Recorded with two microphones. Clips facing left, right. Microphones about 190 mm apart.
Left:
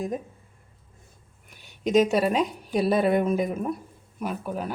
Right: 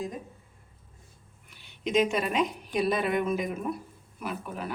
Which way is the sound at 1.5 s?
45° left (ahead or behind).